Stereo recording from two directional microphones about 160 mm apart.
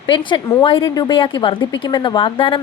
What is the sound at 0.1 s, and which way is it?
A woman's voice, 30° left (ahead or behind).